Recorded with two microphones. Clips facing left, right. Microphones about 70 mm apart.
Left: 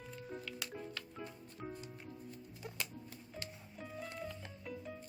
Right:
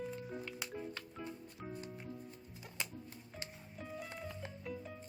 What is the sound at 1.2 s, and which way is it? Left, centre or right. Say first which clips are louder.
Music: right 2 dB; centre.